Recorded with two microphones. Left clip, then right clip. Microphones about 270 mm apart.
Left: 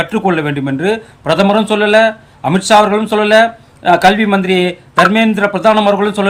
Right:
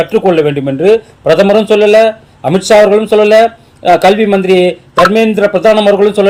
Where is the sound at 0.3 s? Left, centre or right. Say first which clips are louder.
Right 6 dB; left.